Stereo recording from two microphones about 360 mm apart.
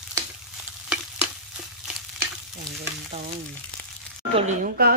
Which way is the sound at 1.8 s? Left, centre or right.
Centre.